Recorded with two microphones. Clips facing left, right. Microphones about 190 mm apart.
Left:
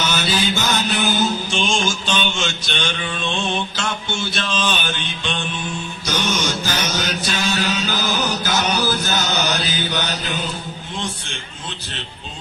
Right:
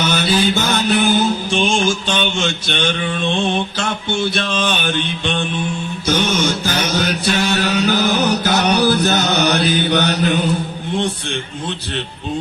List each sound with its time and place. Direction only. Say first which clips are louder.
0.0 s music: right 5 dB; 55° right (ahead or behind)
1.0 s mantra: right 4 dB; 55° right (ahead or behind)